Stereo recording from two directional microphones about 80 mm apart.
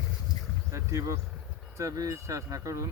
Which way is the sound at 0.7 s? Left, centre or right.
Right.